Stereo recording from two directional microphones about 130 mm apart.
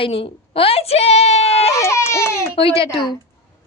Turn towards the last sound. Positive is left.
turn(degrees=40)  # may be behind; listen again after turning